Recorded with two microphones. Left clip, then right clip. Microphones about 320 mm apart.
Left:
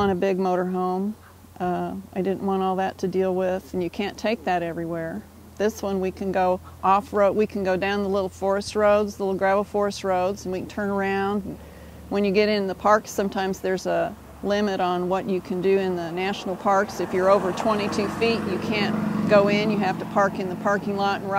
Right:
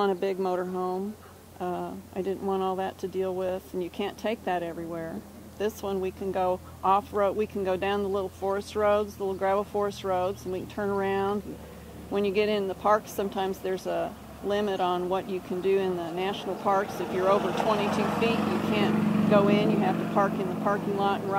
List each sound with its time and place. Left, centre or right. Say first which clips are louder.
0.0 s speech: left 4 dB; left